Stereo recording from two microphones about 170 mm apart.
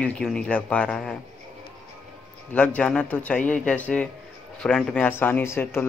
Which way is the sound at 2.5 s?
5° left (ahead or behind).